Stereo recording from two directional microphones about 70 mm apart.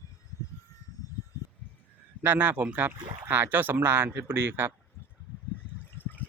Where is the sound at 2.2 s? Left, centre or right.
Right.